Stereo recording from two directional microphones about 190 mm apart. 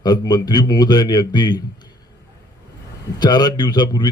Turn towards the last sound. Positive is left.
turn(degrees=20)  # may be behind; listen again after turning